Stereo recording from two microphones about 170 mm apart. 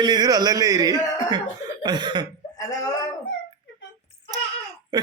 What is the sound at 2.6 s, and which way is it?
Speech, 20° left (ahead or behind).